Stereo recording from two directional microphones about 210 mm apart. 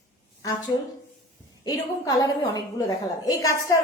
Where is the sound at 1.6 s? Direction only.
15° left (ahead or behind).